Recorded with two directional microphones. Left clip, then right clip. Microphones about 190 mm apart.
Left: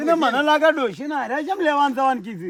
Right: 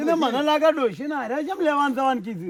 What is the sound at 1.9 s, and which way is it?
Speech, 35° left (ahead or behind).